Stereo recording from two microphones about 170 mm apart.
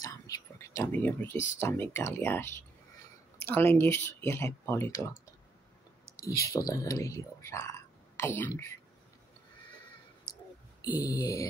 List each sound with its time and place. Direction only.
0.0 s whispering: 20° left (ahead or behind)
1.6 s speech: 15° left (ahead or behind)
6.2 s speech: 20° left (ahead or behind)
10.3 s clicking: 55° left (ahead or behind)
10.8 s speech: 20° left (ahead or behind)